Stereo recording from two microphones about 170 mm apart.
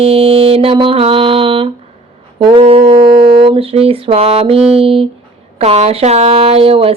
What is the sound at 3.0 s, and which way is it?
Speech, 30° right (ahead or behind).